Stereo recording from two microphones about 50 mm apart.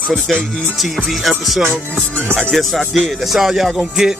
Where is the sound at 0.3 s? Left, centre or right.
Centre.